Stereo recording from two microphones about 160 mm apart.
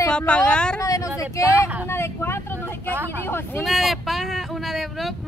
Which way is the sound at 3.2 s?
15° left (ahead or behind).